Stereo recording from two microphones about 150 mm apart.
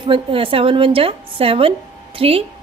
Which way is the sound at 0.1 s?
35° right (ahead or behind).